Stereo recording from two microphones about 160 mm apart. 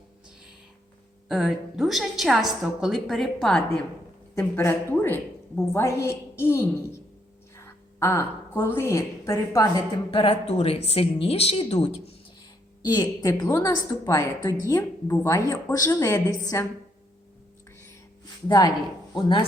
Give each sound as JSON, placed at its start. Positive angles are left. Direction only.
{"t": 1.3, "sound": "a woman's voice", "side_deg": -5}
{"t": 4.4, "sound": "a woman's voice", "side_deg": 15}
{"t": 10.1, "sound": "speech", "side_deg": 35}
{"t": 12.8, "sound": "a woman's voice", "side_deg": 25}
{"t": 18.4, "sound": "a woman's voice", "side_deg": 25}